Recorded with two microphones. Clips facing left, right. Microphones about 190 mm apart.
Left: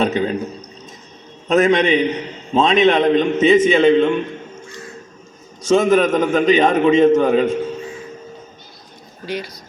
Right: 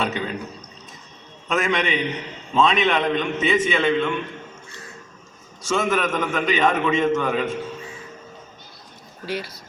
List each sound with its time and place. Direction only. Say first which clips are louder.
0.0 s a sound: left 8 dB; 40° left (ahead or behind)
1.5 s a man's voice: left 9 dB; 40° left (ahead or behind)
5.6 s a man's voice: left 8 dB; 40° left (ahead or behind)
9.2 s speech: left 3 dB; 5° right (ahead or behind)